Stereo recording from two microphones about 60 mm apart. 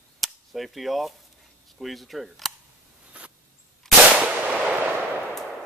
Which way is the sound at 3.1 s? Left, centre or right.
Centre.